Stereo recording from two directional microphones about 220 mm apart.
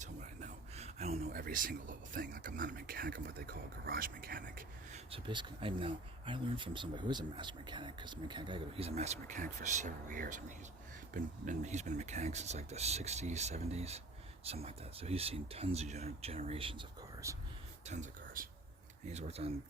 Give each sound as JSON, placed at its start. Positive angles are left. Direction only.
{"t": 0.0, "sound": "speech", "side_deg": -35}
{"t": 5.1, "sound": "speech", "side_deg": -20}
{"t": 17.8, "sound": "speech", "side_deg": -35}